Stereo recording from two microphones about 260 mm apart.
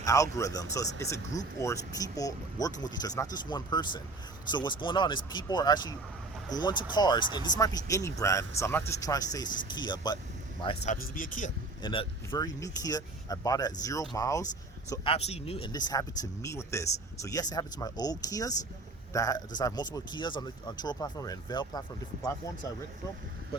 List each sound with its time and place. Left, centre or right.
0.0 s speech: centre
10.9 s speech: left
11.8 s speech: centre